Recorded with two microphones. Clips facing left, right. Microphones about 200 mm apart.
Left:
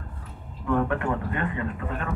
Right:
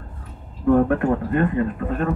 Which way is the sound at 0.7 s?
45° right (ahead or behind).